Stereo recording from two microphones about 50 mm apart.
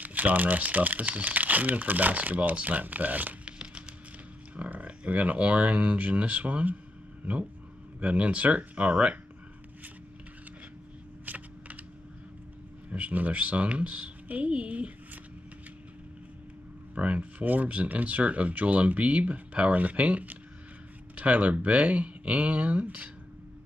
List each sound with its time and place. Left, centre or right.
0.0 s speech: right
3.4 s a sound: centre
4.6 s speech: right
8.0 s speech: right
11.2 s computer keyboard: right
12.9 s speech: right
16.9 s speech: right